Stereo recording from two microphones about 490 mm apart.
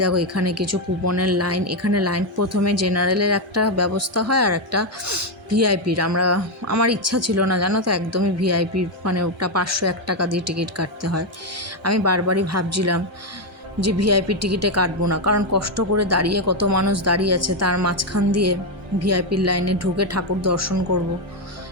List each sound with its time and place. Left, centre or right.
0.0 s a woman's voice: right